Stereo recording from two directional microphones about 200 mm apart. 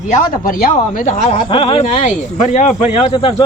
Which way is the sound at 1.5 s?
25° left (ahead or behind).